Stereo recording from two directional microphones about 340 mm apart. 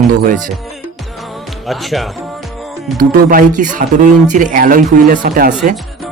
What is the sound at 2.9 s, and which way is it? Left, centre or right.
Speech, right.